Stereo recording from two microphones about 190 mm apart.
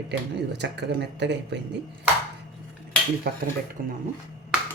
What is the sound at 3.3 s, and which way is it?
Speech, 55° right (ahead or behind).